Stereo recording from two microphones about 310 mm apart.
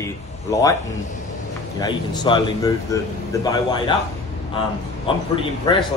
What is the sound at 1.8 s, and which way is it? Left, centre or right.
A man's voice, centre.